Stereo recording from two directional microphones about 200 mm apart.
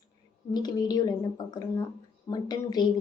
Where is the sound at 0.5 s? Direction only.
20° left (ahead or behind).